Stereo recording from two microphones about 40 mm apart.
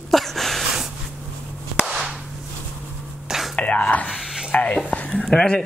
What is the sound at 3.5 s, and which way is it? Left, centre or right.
Whispering, left.